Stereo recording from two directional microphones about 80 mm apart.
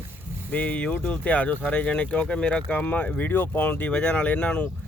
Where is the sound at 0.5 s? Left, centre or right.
Centre.